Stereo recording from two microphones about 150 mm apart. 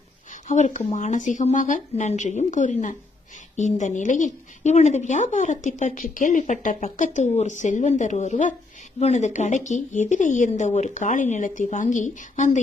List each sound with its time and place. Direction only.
0.4 s a woman's voice: 50° left (ahead or behind)